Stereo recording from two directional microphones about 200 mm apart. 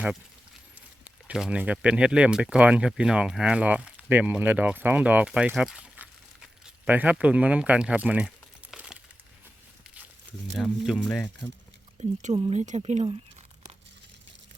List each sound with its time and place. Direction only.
1.0 s speech: 5° right (ahead or behind)
8.7 s a sound: 5° right (ahead or behind)
10.6 s speech: centre (ahead or behind)
11.9 s speech: 30° right (ahead or behind)